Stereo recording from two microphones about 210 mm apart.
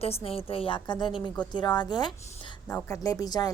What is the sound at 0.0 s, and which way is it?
A woman's voice, 30° left (ahead or behind).